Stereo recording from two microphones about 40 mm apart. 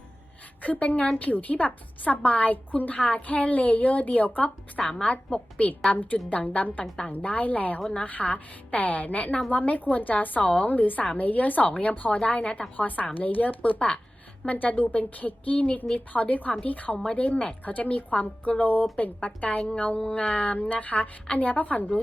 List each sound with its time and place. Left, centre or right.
0.6 s a woman's voice: left
4.9 s a woman's voice: centre
5.6 s a woman's voice: left
12.7 s a woman's voice: left
13.6 s a woman's voice: left
17.1 s a woman's voice: left